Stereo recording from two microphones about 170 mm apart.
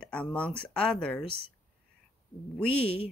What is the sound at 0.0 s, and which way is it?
Speech, 5° left (ahead or behind).